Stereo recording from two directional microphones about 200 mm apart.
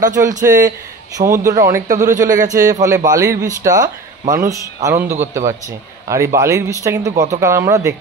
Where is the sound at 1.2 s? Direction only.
15° right (ahead or behind).